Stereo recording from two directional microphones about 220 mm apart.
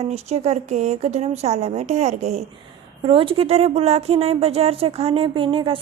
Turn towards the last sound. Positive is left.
turn(degrees=-25)  # may be behind; listen again after turning